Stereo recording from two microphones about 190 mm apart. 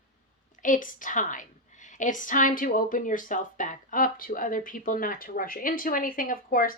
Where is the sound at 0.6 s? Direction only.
45° left (ahead or behind).